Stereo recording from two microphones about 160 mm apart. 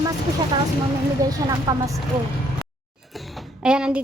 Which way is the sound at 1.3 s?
25° right (ahead or behind).